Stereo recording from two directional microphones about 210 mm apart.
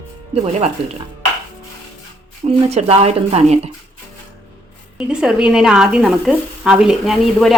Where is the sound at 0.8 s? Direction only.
30° right (ahead or behind).